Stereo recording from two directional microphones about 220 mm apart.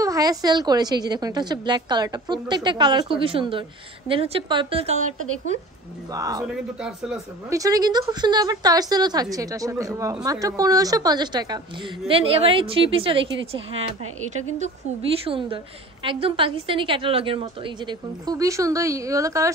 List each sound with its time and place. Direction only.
0.0 s a woman's voice: 15° right (ahead or behind)
6.1 s speech: 15° right (ahead or behind)
6.4 s speech: 5° right (ahead or behind)
7.5 s a woman's voice: 15° right (ahead or behind)